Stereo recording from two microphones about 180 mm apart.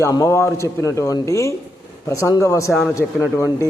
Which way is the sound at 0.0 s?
15° left (ahead or behind).